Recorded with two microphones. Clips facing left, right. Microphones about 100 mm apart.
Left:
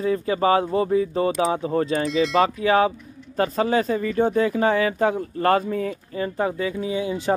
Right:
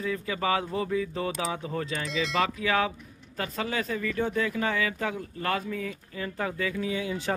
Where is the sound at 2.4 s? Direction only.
35° left (ahead or behind).